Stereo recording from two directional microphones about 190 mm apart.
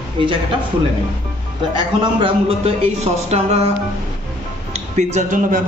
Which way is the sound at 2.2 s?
30° right (ahead or behind).